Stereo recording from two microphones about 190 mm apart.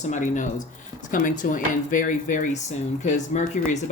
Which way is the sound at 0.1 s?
40° left (ahead or behind).